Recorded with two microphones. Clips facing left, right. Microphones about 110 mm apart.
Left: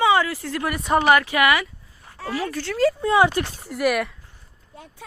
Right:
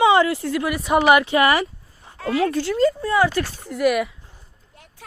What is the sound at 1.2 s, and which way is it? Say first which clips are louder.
Speech: right 2 dB; 30° right (ahead or behind).